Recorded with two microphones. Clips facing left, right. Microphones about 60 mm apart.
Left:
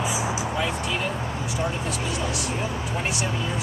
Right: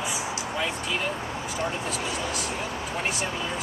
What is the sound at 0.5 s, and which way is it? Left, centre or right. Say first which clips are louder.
Speech: left 2 dB; centre.